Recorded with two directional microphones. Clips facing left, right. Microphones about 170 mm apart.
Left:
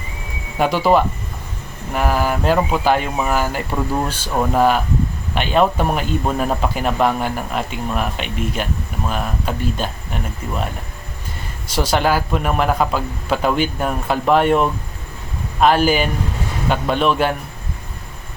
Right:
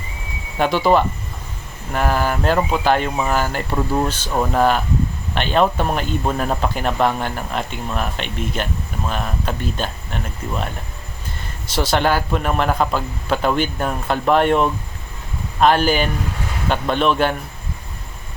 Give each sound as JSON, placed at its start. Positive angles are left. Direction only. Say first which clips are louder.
{"t": 0.6, "sound": "speech", "louder": "left 1 dB", "side_deg": 5}
{"t": 11.7, "sound": "speech", "louder": "left 1 dB", "side_deg": 10}